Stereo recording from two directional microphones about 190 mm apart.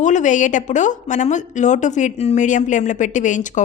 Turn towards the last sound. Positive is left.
turn(degrees=40)  # may be behind; listen again after turning